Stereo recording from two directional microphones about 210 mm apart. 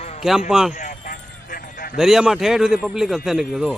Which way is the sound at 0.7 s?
40° left (ahead or behind).